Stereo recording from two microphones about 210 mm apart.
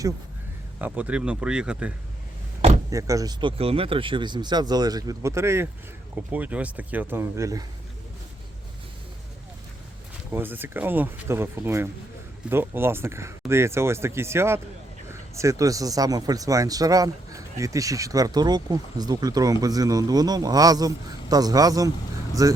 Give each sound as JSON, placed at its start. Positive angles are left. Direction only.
{"t": 0.8, "sound": "speech", "side_deg": -5}
{"t": 2.6, "sound": "door", "side_deg": -30}
{"t": 2.9, "sound": "speech", "side_deg": -15}
{"t": 10.3, "sound": "speech", "side_deg": -10}